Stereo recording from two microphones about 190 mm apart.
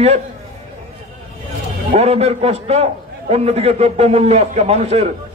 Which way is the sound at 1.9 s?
35° right (ahead or behind).